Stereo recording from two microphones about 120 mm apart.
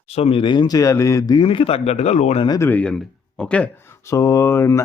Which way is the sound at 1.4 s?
50° left (ahead or behind).